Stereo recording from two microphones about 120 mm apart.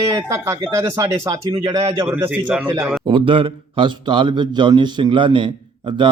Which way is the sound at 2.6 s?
20° right (ahead or behind).